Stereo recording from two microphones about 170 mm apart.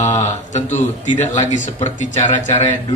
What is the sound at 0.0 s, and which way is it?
A man's voice, 45° left (ahead or behind).